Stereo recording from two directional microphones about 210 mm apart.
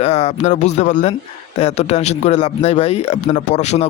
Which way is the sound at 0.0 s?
30° left (ahead or behind).